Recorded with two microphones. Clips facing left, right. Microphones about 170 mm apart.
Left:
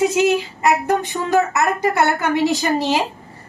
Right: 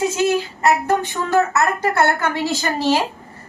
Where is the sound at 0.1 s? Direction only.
15° left (ahead or behind).